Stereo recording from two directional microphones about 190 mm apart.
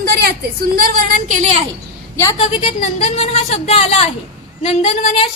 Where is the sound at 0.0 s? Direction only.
55° right (ahead or behind).